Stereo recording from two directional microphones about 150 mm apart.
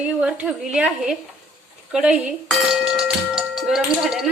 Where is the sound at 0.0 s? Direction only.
5° right (ahead or behind).